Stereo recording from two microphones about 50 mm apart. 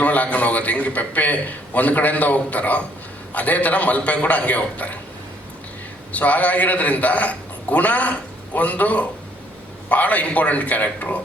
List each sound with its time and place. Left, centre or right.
0.0 s a man's voice: left
6.1 s a man's voice: left